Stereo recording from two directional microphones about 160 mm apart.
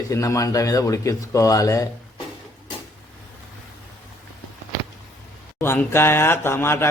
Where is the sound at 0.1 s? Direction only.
20° left (ahead or behind).